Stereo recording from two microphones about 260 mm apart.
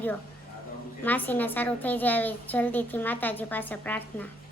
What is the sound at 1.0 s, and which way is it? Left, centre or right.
A woman's voice, centre.